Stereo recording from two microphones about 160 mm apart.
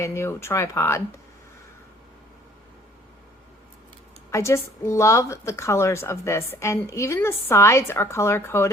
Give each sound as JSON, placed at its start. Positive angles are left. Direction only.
{"t": 0.0, "sound": "a woman's voice", "side_deg": 15}
{"t": 4.3, "sound": "a woman's voice", "side_deg": 15}